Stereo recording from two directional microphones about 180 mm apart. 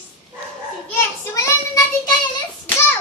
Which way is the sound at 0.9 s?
15° left (ahead or behind).